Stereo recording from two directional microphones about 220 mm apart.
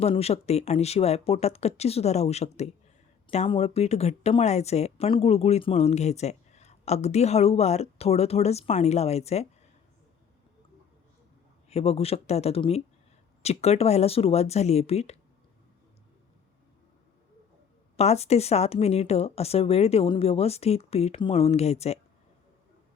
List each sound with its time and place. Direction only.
0.0 s speech: 25° left (ahead or behind)
11.7 s speech: 25° left (ahead or behind)
17.9 s speech: 30° left (ahead or behind)